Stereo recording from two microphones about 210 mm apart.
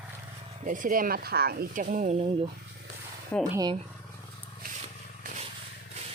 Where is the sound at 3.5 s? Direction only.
20° right (ahead or behind).